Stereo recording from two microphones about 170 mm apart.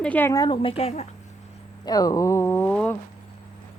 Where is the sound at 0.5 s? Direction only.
35° left (ahead or behind).